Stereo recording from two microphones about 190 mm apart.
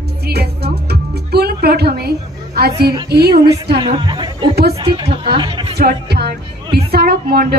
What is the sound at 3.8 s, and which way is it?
Speech, 25° right (ahead or behind).